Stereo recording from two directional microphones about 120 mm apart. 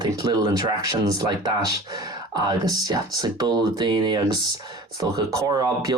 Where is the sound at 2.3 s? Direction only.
35° right (ahead or behind).